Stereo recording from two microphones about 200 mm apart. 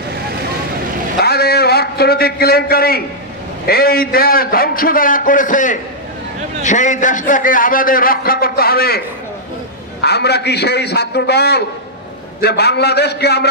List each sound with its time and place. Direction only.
1.2 s a sound: 50° left (ahead or behind)
3.6 s a man's voice: 50° left (ahead or behind)
10.0 s a man's voice: 55° left (ahead or behind)